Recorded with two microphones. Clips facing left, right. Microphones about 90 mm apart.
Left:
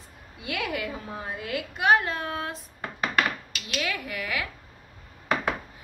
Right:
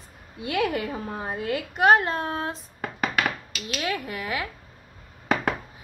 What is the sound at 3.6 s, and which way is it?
Speech, 30° right (ahead or behind).